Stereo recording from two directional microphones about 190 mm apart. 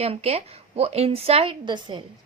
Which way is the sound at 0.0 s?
35° right (ahead or behind).